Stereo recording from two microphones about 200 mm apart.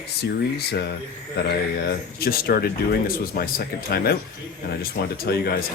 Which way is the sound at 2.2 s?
50° left (ahead or behind).